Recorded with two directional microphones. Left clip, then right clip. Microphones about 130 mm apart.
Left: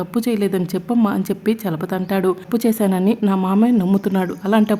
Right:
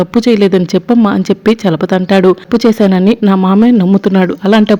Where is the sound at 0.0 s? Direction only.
35° right (ahead or behind).